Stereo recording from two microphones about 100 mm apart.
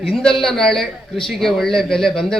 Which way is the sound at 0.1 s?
5° left (ahead or behind).